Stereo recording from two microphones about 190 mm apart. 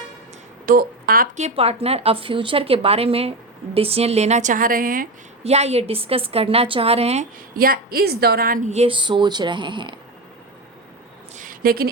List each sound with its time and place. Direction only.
0.6 s speech: 50° right (ahead or behind)
1.5 s speech: 30° right (ahead or behind)
5.4 s speech: 35° right (ahead or behind)
7.5 s speech: 50° right (ahead or behind); by 9.9 s 25° right (ahead or behind)
11.3 s a sound: 50° right (ahead or behind)